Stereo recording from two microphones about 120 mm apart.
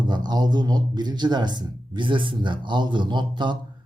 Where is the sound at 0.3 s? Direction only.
35° right (ahead or behind).